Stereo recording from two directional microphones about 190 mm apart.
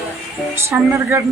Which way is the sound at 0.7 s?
10° right (ahead or behind).